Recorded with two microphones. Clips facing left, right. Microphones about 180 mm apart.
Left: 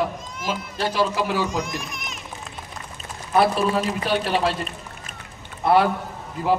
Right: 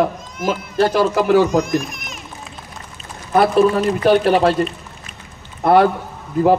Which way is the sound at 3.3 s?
45° right (ahead or behind).